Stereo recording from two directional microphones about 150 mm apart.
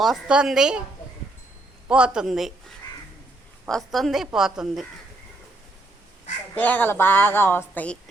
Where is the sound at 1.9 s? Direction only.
5° right (ahead or behind).